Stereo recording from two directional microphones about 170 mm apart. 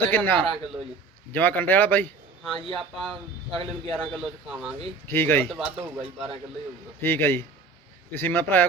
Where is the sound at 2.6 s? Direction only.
30° right (ahead or behind).